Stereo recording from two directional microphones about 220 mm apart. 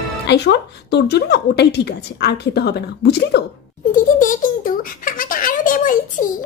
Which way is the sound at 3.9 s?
35° left (ahead or behind).